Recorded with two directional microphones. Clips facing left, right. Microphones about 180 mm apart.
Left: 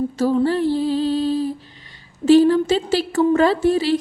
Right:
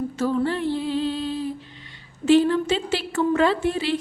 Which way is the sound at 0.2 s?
35° left (ahead or behind).